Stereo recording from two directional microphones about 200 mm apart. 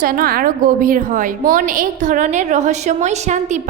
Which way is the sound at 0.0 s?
45° right (ahead or behind).